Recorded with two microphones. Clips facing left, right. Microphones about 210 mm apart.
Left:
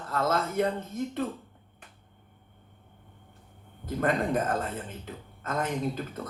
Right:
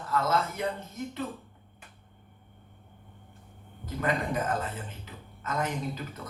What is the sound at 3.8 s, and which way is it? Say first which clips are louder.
Speech: left 3 dB; 55° left (ahead or behind).